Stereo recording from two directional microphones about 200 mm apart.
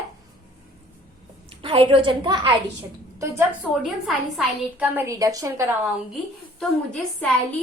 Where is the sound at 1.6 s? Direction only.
25° right (ahead or behind).